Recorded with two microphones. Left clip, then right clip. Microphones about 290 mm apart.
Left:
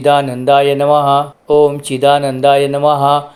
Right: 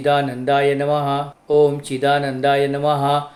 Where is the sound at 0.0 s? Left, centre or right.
Left.